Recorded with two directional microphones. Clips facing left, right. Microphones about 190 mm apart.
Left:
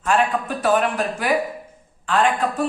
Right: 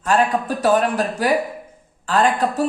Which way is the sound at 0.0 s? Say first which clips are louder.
Right 2 dB; 40° right (ahead or behind).